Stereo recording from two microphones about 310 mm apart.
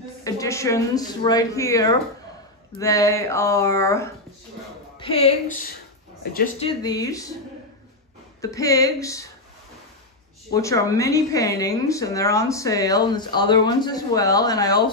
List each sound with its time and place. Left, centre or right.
0.2 s a woman's voice: centre; by 6.7 s left
6.8 s a woman's voice: centre
8.4 s a woman's voice: centre
10.5 s a woman's voice: centre